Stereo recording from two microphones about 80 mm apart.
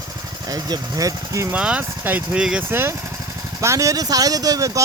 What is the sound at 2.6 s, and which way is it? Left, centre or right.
Speech, right.